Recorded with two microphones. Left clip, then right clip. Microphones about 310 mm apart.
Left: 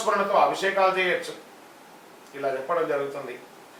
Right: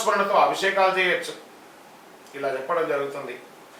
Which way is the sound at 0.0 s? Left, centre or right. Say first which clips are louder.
Right 2 dB; centre.